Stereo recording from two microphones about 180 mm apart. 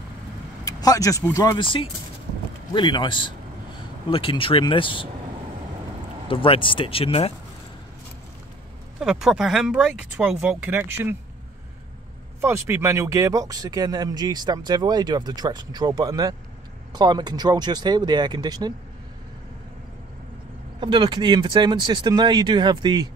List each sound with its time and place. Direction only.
0.7 s speech: 20° left (ahead or behind)
6.2 s speech: 30° left (ahead or behind)
9.0 s speech: 5° right (ahead or behind)
12.4 s speech: 15° right (ahead or behind)
20.8 s speech: 25° right (ahead or behind)